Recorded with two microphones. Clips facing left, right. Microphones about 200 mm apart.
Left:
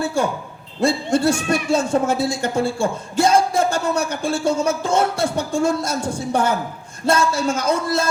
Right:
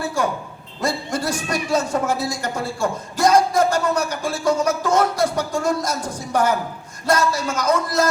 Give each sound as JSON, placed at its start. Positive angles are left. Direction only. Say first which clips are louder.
{"t": 0.8, "sound": "a man's voice", "louder": "left 6 dB", "side_deg": 30}